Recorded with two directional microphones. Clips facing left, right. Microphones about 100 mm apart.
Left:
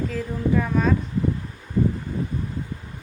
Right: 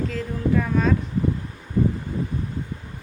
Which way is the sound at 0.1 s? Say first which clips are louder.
Even; 5° left (ahead or behind).